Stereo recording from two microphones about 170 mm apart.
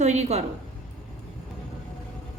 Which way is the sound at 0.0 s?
40° right (ahead or behind).